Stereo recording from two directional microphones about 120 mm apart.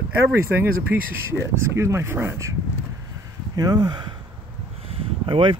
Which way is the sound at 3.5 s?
35° right (ahead or behind).